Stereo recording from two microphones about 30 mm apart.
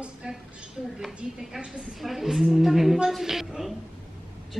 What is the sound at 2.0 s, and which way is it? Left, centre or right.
A woman's voice, centre.